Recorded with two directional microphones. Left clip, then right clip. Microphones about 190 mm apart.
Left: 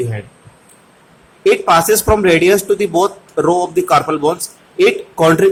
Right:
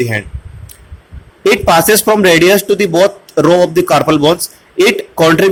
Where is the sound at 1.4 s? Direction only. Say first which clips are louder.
Right 2 dB; 20° right (ahead or behind).